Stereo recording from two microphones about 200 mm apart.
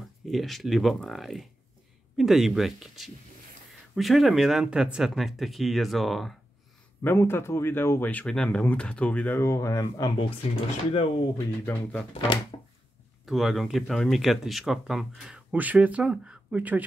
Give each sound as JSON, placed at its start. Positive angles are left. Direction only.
{"t": 0.2, "sound": "speech", "side_deg": 0}
{"t": 7.0, "sound": "speech", "side_deg": 10}
{"t": 10.9, "sound": "speech", "side_deg": 25}
{"t": 11.6, "sound": "speech", "side_deg": 10}
{"t": 12.1, "sound": "speech", "side_deg": 30}
{"t": 13.2, "sound": "speech", "side_deg": 0}